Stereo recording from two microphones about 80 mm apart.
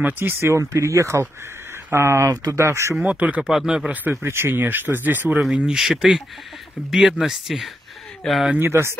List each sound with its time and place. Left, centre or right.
0.0 s speech: right
3.1 s speech: centre
3.9 s speech: right; by 7.7 s centre
8.2 s speech: centre
8.5 s speech: right